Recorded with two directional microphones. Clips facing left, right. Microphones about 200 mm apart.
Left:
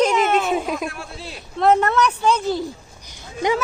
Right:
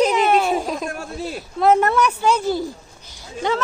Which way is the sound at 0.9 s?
45° right (ahead or behind).